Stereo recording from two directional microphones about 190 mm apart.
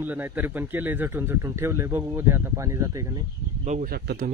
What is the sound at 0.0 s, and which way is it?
Speech, 10° right (ahead or behind).